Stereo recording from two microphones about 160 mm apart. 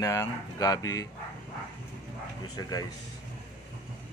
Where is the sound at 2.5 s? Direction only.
25° left (ahead or behind).